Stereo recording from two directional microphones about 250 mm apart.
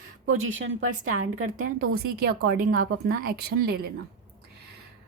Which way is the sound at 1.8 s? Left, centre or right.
Right.